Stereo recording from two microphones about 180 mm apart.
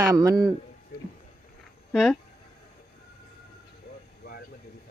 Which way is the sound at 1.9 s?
Centre (ahead or behind).